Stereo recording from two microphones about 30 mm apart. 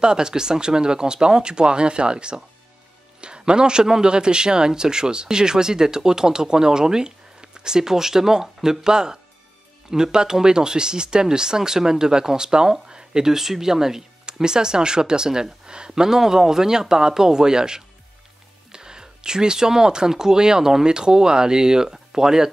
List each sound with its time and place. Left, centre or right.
0.0 s speech: right
14.2 s speech: right